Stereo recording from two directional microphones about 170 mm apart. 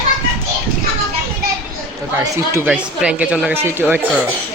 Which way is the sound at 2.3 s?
15° right (ahead or behind).